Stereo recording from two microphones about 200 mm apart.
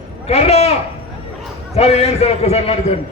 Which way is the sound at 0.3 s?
30° left (ahead or behind).